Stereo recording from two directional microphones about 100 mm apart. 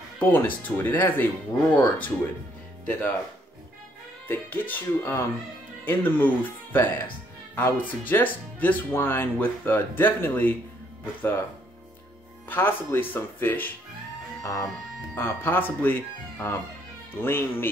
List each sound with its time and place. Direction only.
0.2 s speech: 20° left (ahead or behind)
4.3 s speech: 20° left (ahead or behind)
12.4 s speech: 20° left (ahead or behind)
14.4 s speech: 30° left (ahead or behind)
15.1 s speech: 20° left (ahead or behind)